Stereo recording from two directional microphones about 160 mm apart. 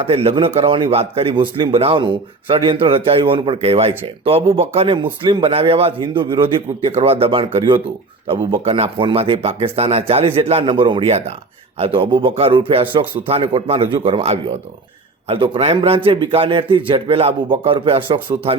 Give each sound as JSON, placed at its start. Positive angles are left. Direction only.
{"t": 0.0, "sound": "a man's voice", "side_deg": -40}